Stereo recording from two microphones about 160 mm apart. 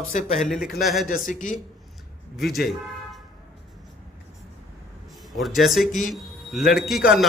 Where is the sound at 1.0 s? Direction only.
55° left (ahead or behind).